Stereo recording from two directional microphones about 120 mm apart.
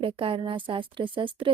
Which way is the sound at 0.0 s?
50° right (ahead or behind).